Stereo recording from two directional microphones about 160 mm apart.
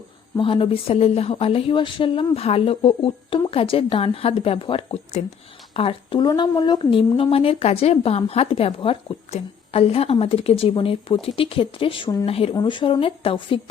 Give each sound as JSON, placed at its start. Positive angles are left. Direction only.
{"t": 0.3, "sound": "a woman's voice", "side_deg": 35}